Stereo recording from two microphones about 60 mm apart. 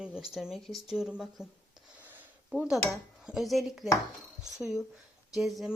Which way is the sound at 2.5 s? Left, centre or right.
Centre.